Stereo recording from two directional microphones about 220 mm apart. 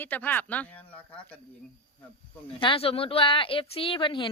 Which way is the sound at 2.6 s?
25° left (ahead or behind).